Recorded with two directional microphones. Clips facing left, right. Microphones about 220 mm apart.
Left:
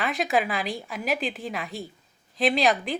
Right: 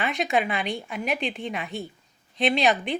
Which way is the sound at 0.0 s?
Centre (ahead or behind).